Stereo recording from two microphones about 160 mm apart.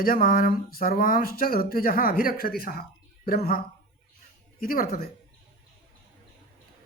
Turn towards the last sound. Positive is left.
turn(degrees=65)  # may be behind; listen again after turning